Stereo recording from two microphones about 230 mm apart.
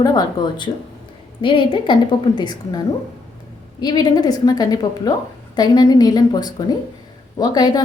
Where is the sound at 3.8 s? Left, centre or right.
Centre.